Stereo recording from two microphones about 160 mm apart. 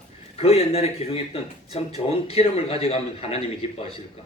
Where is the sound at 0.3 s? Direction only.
40° left (ahead or behind).